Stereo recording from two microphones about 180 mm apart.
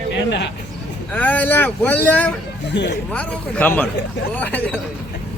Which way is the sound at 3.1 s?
10° left (ahead or behind).